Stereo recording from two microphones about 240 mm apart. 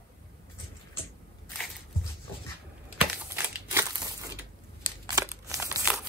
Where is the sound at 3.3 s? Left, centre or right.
Centre.